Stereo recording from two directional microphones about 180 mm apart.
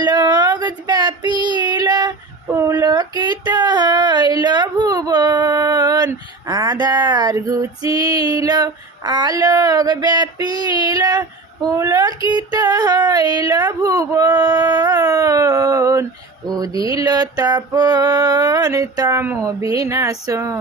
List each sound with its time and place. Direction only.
0.0 s child singing: 25° right (ahead or behind)
12.5 s speech: 20° right (ahead or behind)